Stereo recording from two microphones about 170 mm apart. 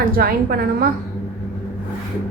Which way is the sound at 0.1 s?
60° right (ahead or behind).